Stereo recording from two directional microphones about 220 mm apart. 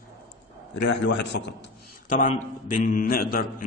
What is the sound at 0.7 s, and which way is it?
Speech, 50° left (ahead or behind).